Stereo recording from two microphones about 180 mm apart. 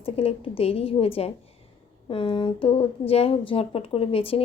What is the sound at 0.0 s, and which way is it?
A woman's voice, 30° left (ahead or behind).